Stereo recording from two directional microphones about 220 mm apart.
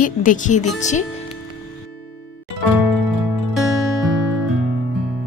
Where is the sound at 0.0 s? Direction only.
35° left (ahead or behind).